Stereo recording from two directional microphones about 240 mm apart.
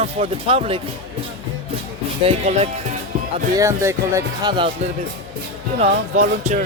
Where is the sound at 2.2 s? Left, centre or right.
Right.